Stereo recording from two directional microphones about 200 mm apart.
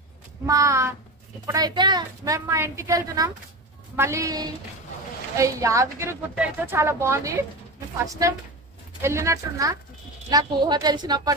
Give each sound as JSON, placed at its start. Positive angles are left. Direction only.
{"t": 0.5, "sound": "a woman's voice", "side_deg": -15}